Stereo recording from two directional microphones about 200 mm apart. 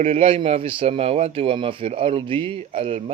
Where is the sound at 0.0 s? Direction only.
30° right (ahead or behind).